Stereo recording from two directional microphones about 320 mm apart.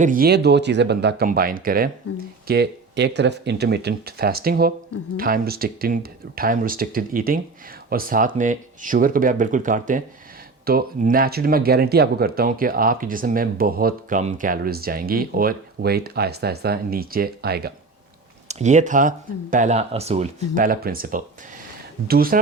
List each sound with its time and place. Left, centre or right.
0.0 s speech: right